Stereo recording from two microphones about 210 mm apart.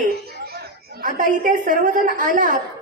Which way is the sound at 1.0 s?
40° right (ahead or behind).